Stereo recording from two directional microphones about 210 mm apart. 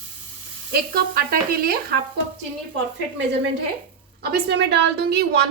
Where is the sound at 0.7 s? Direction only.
45° right (ahead or behind).